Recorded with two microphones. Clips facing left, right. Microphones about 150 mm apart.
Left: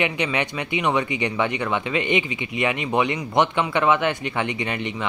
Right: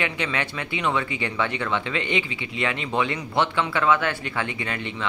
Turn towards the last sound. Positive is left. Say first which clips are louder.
# left 4 dB
turn(degrees=20)  # may be behind; listen again after turning